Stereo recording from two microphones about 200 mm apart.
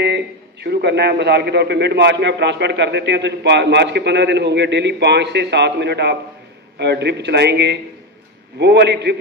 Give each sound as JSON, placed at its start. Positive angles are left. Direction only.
{"t": 0.0, "sound": "a man's voice", "side_deg": -55}